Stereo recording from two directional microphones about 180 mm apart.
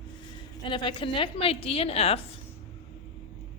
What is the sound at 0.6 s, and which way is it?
A woman's voice, 25° left (ahead or behind).